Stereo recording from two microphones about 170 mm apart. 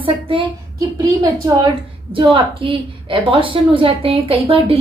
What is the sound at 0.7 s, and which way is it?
Speech, 20° right (ahead or behind).